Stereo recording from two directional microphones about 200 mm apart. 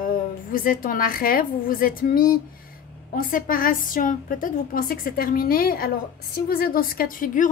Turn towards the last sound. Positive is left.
turn(degrees=45)  # may be behind; listen again after turning